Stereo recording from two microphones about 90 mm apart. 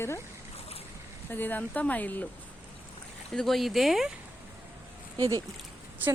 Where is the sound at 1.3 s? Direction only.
20° left (ahead or behind).